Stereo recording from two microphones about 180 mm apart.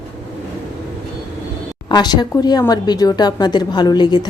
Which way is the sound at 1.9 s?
25° left (ahead or behind).